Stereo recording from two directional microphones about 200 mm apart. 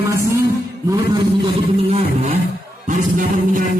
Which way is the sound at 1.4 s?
30° right (ahead or behind).